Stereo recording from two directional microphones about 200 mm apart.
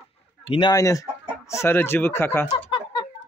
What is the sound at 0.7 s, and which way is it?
Speech, 15° left (ahead or behind).